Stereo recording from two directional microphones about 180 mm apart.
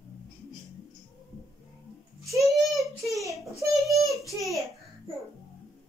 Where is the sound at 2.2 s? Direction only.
15° right (ahead or behind).